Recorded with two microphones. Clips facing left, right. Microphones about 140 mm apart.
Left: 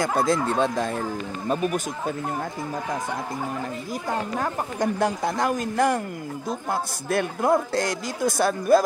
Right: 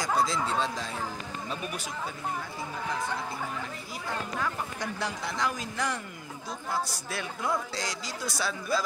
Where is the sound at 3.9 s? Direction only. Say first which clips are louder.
Left 7 dB; 45° left (ahead or behind).